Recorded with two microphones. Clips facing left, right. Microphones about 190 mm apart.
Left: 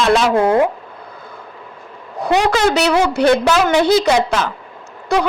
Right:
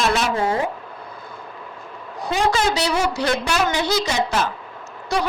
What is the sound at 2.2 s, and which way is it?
A woman's voice, 65° left (ahead or behind).